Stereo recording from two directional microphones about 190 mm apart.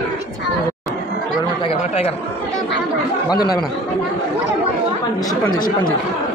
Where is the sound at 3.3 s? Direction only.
20° left (ahead or behind).